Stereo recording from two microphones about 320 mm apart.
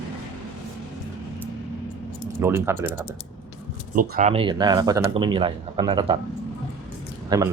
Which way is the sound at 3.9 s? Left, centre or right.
Right.